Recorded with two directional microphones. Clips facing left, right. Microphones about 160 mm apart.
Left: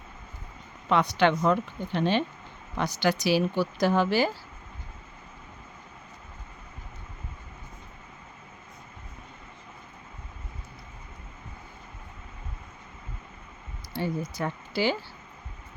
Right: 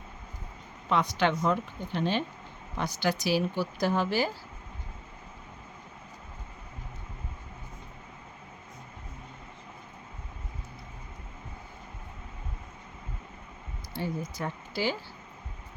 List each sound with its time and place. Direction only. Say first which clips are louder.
0.9 s speech: left 4 dB; 70° left (ahead or behind)
13.9 s speech: left 3 dB; 75° left (ahead or behind)